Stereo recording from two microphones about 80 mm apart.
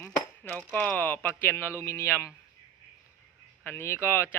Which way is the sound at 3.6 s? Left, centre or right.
Left.